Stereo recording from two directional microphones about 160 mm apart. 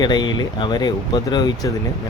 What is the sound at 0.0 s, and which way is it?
Speech, 25° left (ahead or behind).